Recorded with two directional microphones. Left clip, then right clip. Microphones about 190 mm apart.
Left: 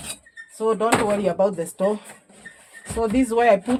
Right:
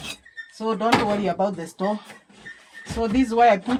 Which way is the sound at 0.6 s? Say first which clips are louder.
Left 1 dB; 40° left (ahead or behind).